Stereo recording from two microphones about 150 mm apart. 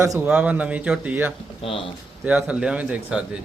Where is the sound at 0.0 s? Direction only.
15° right (ahead or behind).